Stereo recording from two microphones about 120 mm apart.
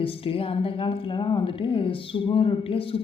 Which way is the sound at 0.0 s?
50° left (ahead or behind).